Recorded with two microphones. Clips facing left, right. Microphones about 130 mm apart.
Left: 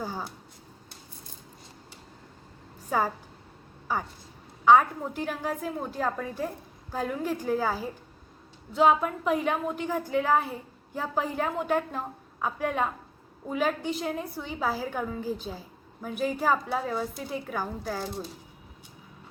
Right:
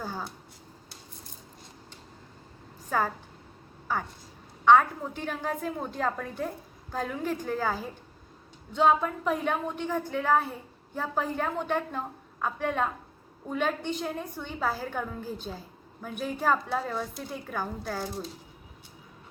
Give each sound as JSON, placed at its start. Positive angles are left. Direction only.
{"t": 0.0, "sound": "speech", "side_deg": 15}
{"t": 2.9, "sound": "a woman's voice", "side_deg": 10}